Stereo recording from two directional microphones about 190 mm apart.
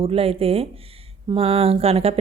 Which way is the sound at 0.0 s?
30° right (ahead or behind).